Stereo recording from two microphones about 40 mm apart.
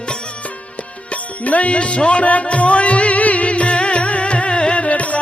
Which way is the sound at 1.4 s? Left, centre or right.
Left.